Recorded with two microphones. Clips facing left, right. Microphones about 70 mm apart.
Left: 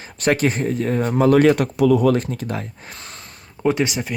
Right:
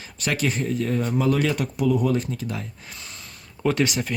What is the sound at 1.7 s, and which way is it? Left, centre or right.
Speech, left.